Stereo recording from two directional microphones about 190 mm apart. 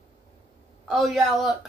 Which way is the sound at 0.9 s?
Centre (ahead or behind).